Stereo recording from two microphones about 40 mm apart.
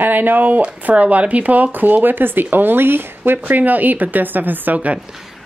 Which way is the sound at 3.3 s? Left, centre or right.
Right.